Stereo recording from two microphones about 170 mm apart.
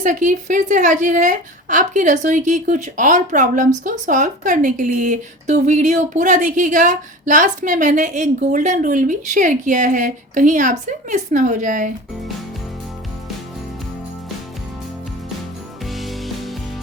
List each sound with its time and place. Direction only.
0.0 s speech: 50° right (ahead or behind)
15.9 s music: centre (ahead or behind)